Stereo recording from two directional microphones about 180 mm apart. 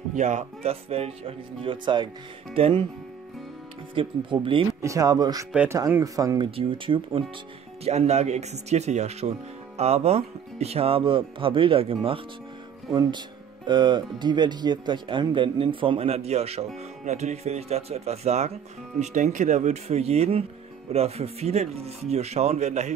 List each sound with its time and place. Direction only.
0.1 s speech: 45° right (ahead or behind)
3.9 s speech: 30° right (ahead or behind)
5.5 s speech: 10° right (ahead or behind); by 22.9 s 40° right (ahead or behind)